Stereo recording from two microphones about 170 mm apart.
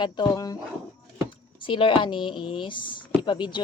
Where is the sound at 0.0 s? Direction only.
25° left (ahead or behind).